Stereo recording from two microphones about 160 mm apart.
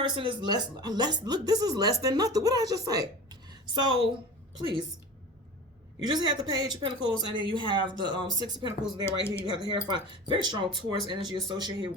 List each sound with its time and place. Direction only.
0.0 s speech: 30° right (ahead or behind)
6.0 s speech: 25° right (ahead or behind)
9.0 s speech: 15° left (ahead or behind)
9.4 s speech: 25° right (ahead or behind)